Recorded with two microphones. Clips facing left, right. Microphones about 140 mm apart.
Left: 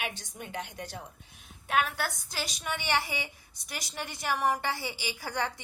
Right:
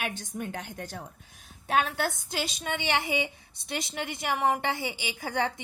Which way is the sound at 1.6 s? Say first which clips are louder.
Right 2 dB; 30° right (ahead or behind).